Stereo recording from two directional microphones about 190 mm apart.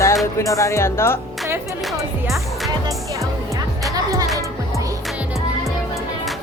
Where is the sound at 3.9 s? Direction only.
20° right (ahead or behind).